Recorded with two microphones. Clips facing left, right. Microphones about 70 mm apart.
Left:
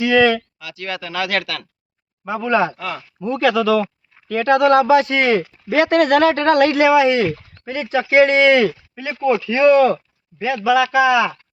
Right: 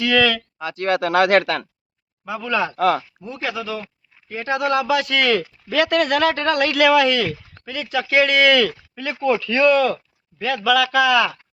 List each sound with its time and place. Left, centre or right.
0.0 s speech: left
0.6 s speech: right
2.2 s speech: left
2.7 s speech: right
3.2 s speech: left
4.3 s speech: left
5.1 s speech: left
5.7 s speech: left
6.7 s speech: left
7.6 s speech: left
9.4 s speech: centre
9.6 s speech: left
10.3 s speech: centre